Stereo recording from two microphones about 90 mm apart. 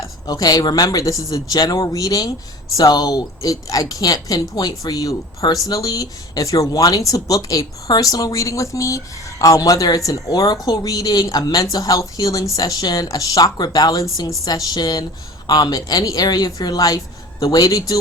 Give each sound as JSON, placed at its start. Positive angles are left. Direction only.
{"t": 0.3, "sound": "speech", "side_deg": 45}